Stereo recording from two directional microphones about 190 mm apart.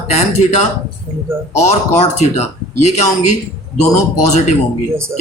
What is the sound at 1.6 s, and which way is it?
Speech, 35° left (ahead or behind).